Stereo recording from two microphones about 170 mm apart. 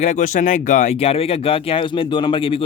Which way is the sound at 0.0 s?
45° left (ahead or behind).